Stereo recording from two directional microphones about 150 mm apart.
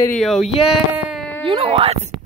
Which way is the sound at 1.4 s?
35° right (ahead or behind).